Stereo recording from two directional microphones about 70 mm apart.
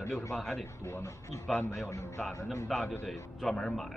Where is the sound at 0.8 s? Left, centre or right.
Left.